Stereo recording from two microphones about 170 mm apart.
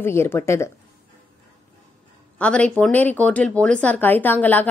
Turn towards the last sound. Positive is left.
turn(degrees=10)  # may be behind; listen again after turning